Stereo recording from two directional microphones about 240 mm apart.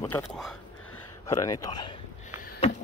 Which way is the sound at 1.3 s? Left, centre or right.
Centre.